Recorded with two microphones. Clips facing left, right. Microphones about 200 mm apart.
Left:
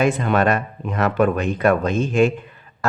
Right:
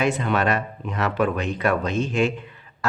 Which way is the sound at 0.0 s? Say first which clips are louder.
Left 4 dB; 50° left (ahead or behind).